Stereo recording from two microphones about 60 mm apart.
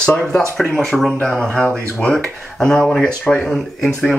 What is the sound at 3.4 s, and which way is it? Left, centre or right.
Speech, centre.